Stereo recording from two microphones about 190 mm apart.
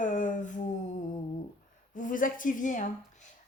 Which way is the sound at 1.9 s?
45° left (ahead or behind).